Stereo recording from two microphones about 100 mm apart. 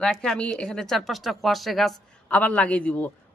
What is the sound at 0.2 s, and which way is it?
A woman's voice, 10° left (ahead or behind).